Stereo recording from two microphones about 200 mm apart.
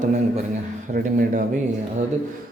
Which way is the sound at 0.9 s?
45° right (ahead or behind).